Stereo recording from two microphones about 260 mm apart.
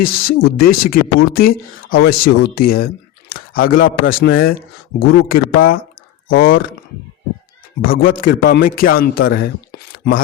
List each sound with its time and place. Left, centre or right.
0.0 s a man's voice: left
4.0 s a man's voice: left
5.3 s a man's voice: left
7.9 s a man's voice: left